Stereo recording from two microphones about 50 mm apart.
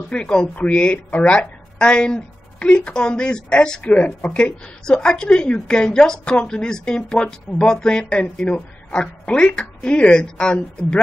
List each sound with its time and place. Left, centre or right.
0.1 s a woman's voice: centre